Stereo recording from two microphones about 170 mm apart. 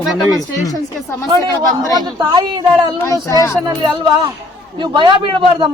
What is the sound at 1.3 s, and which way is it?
A man's voice, 25° right (ahead or behind).